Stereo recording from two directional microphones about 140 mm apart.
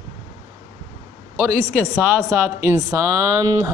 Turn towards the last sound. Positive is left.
turn(degrees=-20)  # may be behind; listen again after turning